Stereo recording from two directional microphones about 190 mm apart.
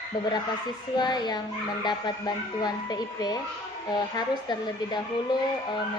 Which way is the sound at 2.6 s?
20° left (ahead or behind).